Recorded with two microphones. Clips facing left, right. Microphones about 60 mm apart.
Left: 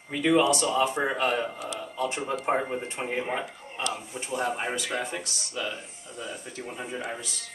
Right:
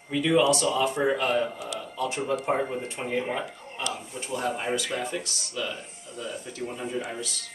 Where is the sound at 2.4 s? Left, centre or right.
Centre.